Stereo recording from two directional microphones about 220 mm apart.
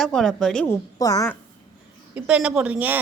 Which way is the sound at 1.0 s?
15° left (ahead or behind).